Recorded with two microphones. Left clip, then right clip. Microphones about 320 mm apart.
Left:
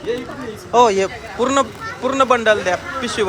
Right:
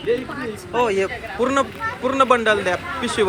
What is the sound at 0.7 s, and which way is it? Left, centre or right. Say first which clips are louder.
Speech: left 8 dB; left.